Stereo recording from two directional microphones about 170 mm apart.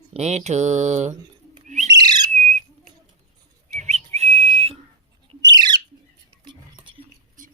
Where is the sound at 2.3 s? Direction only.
45° right (ahead or behind).